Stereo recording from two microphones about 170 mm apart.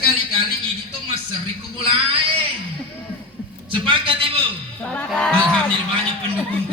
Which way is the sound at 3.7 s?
30° right (ahead or behind).